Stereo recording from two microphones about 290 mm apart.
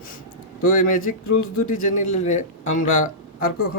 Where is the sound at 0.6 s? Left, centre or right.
Left.